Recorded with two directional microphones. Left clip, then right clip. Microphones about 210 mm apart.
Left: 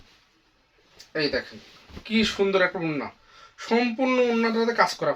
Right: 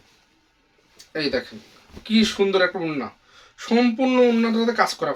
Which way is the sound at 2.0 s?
15° right (ahead or behind).